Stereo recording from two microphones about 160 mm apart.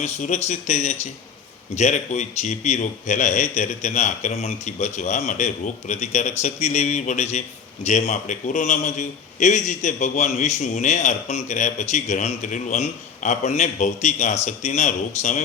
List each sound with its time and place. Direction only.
0.0 s a man's voice: 45° left (ahead or behind)